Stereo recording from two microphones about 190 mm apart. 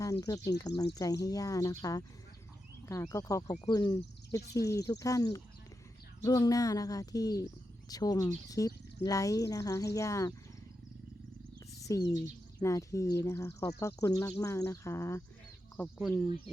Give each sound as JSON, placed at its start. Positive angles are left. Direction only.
{"t": 0.0, "sound": "speech", "side_deg": 20}
{"t": 11.8, "sound": "speech", "side_deg": 15}
{"t": 16.0, "sound": "speech", "side_deg": 0}